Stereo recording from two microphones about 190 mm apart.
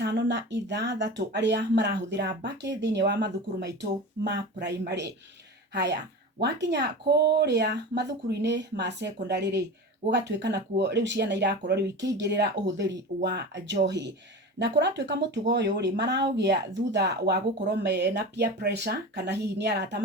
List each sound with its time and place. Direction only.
0.0 s speech: 65° right (ahead or behind)
5.7 s speech: 60° right (ahead or behind)